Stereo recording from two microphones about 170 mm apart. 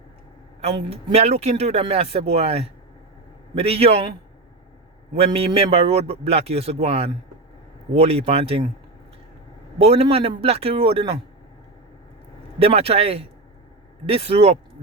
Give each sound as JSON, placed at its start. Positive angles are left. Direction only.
{"t": 0.6, "sound": "speech", "side_deg": -35}
{"t": 5.1, "sound": "speech", "side_deg": -35}
{"t": 9.7, "sound": "speech", "side_deg": -35}
{"t": 12.5, "sound": "speech", "side_deg": -35}